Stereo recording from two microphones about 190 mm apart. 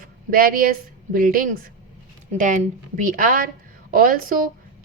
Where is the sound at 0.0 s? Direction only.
50° right (ahead or behind).